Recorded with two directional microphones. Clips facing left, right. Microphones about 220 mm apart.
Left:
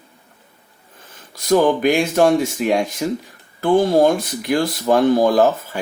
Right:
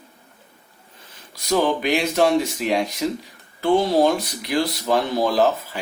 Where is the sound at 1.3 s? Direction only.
50° left (ahead or behind).